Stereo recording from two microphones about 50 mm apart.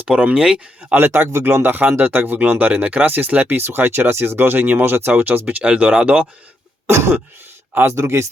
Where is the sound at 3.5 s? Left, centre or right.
Right.